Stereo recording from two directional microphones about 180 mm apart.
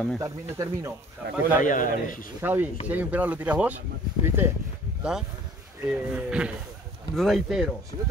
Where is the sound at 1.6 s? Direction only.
45° left (ahead or behind).